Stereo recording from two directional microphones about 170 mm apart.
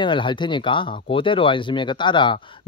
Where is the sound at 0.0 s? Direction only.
30° left (ahead or behind).